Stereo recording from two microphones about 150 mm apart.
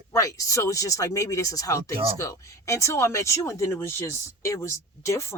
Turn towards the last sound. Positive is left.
turn(degrees=20)  # may be behind; listen again after turning